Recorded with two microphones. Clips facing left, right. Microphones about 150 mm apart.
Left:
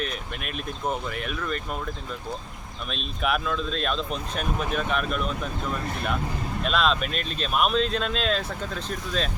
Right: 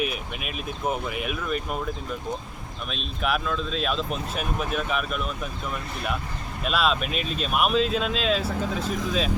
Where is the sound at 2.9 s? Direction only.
Centre (ahead or behind).